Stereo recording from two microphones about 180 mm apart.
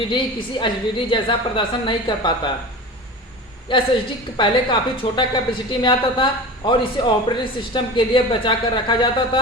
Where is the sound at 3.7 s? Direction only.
30° left (ahead or behind).